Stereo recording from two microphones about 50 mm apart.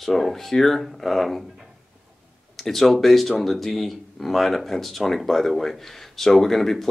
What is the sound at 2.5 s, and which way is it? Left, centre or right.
Speech, centre.